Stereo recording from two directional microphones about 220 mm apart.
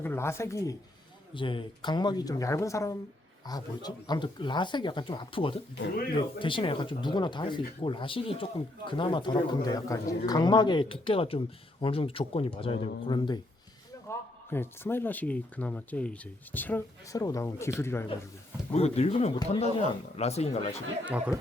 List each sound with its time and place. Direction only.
0.0 s speech: 10° left (ahead or behind)
18.7 s speech: 30° left (ahead or behind)
21.0 s speech: 5° right (ahead or behind)